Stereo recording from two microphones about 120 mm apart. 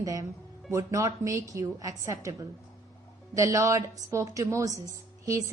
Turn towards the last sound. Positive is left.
turn(degrees=-30)  # may be behind; listen again after turning